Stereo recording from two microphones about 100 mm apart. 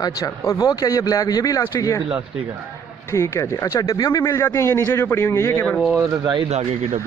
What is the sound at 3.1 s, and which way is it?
Speech, 30° left (ahead or behind).